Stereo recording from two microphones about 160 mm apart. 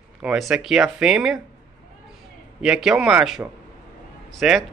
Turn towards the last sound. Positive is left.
turn(degrees=0)  # may be behind; listen again after turning